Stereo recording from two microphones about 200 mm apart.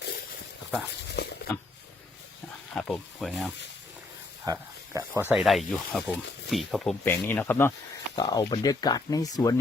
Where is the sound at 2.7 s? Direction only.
5° left (ahead or behind).